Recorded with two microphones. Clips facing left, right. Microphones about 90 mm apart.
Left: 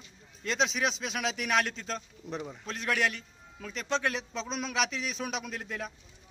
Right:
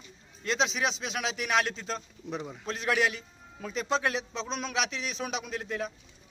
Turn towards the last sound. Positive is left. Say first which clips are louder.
# right 4 dB
turn(degrees=0)  # may be behind; listen again after turning